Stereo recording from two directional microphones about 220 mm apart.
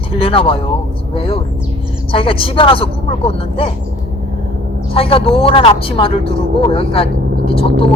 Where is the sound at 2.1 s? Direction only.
25° left (ahead or behind).